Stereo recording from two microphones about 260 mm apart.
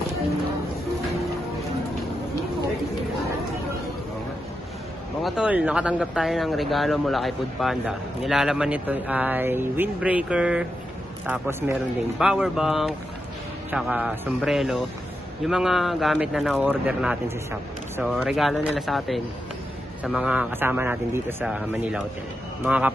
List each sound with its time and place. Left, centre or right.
5.2 s a man's voice: centre